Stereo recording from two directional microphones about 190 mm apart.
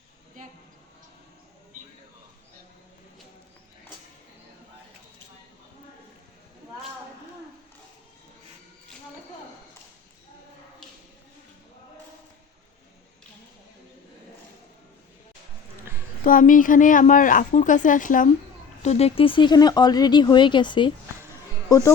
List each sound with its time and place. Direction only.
16.2 s a woman's voice: 45° left (ahead or behind); by 20.9 s 25° left (ahead or behind)